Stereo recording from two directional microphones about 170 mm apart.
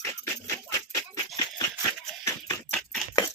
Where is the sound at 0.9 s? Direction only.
20° left (ahead or behind).